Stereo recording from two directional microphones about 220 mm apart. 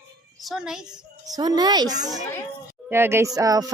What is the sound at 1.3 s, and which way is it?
Speech, 15° right (ahead or behind).